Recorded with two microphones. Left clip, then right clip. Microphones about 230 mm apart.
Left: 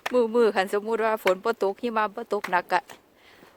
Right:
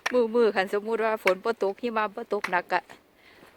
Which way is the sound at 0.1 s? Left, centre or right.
Centre.